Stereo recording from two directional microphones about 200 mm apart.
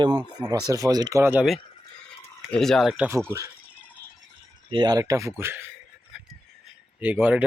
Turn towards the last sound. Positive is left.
turn(degrees=-10)  # may be behind; listen again after turning